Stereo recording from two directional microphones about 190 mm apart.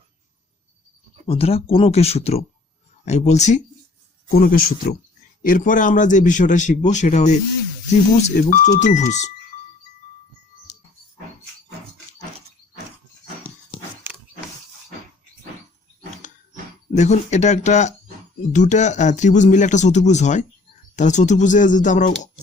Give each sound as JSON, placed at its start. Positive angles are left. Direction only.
{"t": 1.3, "sound": "a man's voice", "side_deg": 30}
{"t": 4.3, "sound": "a man's voice", "side_deg": 50}
{"t": 16.2, "sound": "a sound", "side_deg": 40}
{"t": 16.9, "sound": "a man's voice", "side_deg": 40}